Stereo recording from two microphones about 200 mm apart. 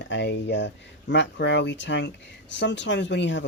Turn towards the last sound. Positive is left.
turn(degrees=60)  # may be behind; listen again after turning